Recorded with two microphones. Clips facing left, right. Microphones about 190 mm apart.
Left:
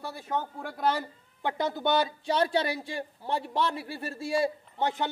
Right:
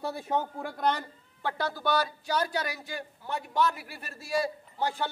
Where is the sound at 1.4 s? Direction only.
20° left (ahead or behind).